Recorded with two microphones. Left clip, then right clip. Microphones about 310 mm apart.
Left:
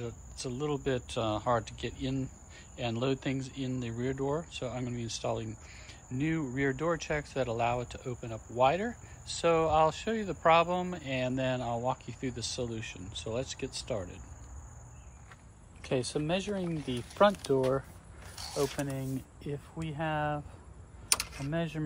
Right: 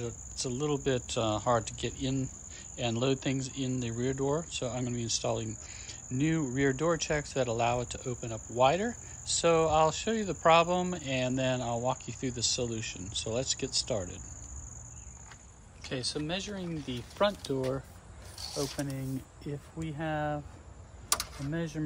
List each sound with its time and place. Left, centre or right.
0.0 s speech: centre
15.8 s speech: centre
21.5 s speech: centre